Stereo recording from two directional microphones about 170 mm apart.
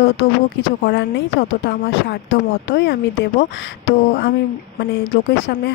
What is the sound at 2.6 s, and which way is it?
A woman's voice, 90° left.